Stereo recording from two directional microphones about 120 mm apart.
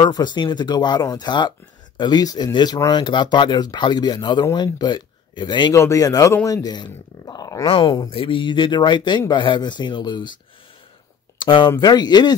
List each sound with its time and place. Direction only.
0.0 s speech: 35° left (ahead or behind)
5.8 s speech: 30° left (ahead or behind)
7.6 s speech: 50° left (ahead or behind)
11.3 s speech: 40° left (ahead or behind)